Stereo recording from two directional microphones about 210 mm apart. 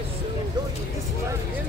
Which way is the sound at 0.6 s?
20° right (ahead or behind).